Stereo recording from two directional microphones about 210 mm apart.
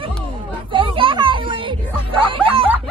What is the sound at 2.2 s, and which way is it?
Music, 25° right (ahead or behind).